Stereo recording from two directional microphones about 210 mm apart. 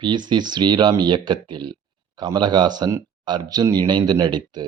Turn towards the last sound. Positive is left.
turn(degrees=-20)  # may be behind; listen again after turning